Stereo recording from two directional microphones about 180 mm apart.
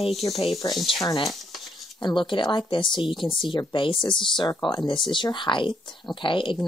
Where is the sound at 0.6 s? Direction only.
20° left (ahead or behind).